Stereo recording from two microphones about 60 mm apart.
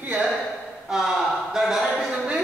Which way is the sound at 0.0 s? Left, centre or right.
Right.